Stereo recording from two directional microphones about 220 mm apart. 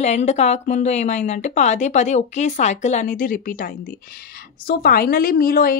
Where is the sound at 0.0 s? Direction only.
30° left (ahead or behind).